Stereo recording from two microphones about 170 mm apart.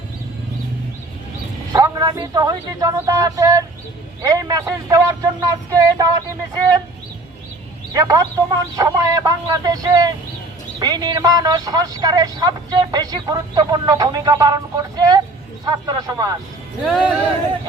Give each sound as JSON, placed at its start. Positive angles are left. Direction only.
{"t": 1.7, "sound": "speech", "side_deg": -20}
{"t": 7.9, "sound": "speech", "side_deg": -20}
{"t": 16.8, "sound": "speech", "side_deg": 0}